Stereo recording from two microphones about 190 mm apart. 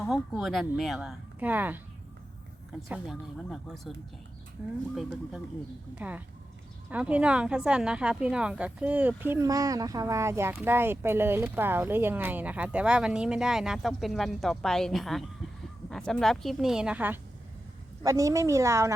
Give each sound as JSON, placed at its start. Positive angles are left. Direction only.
{"t": 0.1, "sound": "speech", "side_deg": 0}
{"t": 2.9, "sound": "speech", "side_deg": 0}
{"t": 4.6, "sound": "speech", "side_deg": -10}
{"t": 5.9, "sound": "speech", "side_deg": -10}